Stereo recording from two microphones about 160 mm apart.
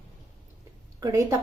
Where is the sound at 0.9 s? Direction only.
20° right (ahead or behind).